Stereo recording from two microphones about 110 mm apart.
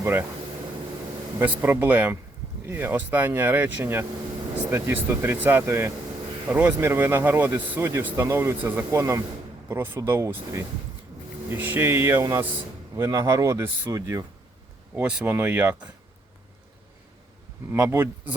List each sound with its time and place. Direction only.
0.0 s speech: 20° right (ahead or behind)
1.4 s speech: 20° right (ahead or behind)
14.9 s speech: 10° right (ahead or behind)
15.2 s speech: 20° right (ahead or behind)
17.7 s speech: 20° right (ahead or behind)